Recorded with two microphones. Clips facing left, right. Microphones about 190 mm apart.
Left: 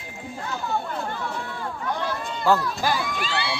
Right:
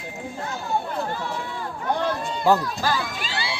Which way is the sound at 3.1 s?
60° left (ahead or behind).